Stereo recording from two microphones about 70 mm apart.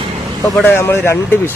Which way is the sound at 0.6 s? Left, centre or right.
Left.